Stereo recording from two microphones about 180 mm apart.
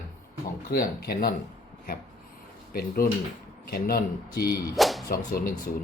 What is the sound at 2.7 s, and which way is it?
Speech, 55° left (ahead or behind).